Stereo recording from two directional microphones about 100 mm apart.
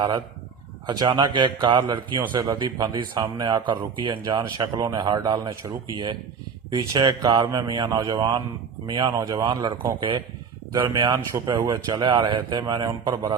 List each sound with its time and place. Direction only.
0.9 s speech: 45° right (ahead or behind)
9.1 s speech: 35° right (ahead or behind)
9.4 s speech: 50° right (ahead or behind)